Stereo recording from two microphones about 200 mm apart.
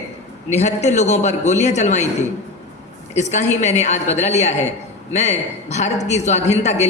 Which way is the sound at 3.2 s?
35° left (ahead or behind).